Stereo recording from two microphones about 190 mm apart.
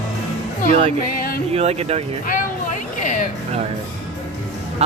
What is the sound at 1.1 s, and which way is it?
Music, 50° left (ahead or behind).